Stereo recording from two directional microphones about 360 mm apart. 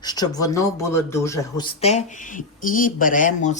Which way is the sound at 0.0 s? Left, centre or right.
Centre.